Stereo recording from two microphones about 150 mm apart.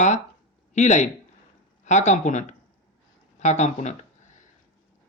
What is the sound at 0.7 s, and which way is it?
Speech, 55° left (ahead or behind).